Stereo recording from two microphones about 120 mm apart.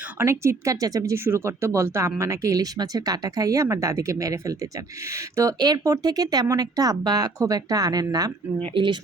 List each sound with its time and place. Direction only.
0.2 s speech: 25° right (ahead or behind)
8.6 s speech: 45° right (ahead or behind)